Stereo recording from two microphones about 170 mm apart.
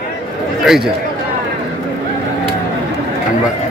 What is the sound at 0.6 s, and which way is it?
Speech, centre (ahead or behind).